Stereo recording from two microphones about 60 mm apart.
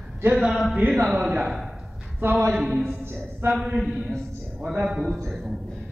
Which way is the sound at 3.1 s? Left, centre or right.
Right.